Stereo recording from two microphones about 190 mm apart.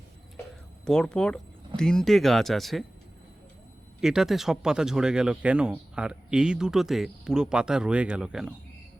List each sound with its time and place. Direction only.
0.9 s speech: 5° left (ahead or behind)
4.0 s speech: 5° right (ahead or behind)